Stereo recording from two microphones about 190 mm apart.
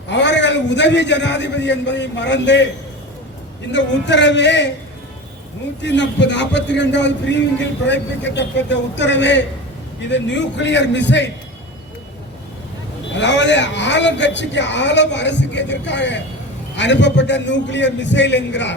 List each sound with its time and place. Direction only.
0.1 s a man's voice: 70° left (ahead or behind)
3.7 s a man's voice: 70° left (ahead or behind)
5.8 s a man's voice: 70° left (ahead or behind)
13.1 s a man's voice: 70° left (ahead or behind)